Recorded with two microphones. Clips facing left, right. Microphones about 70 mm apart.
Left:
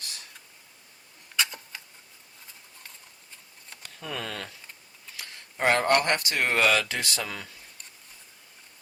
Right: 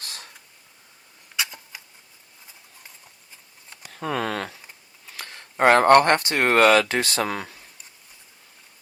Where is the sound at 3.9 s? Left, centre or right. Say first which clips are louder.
Right 9 dB; right.